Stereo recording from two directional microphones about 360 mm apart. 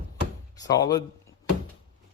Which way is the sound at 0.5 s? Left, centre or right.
Centre.